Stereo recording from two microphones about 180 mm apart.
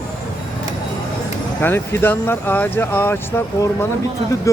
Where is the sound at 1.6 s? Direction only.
10° left (ahead or behind).